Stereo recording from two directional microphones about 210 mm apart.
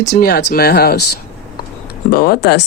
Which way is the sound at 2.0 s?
45° left (ahead or behind).